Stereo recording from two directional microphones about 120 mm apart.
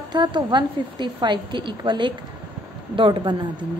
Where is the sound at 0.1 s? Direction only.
40° right (ahead or behind).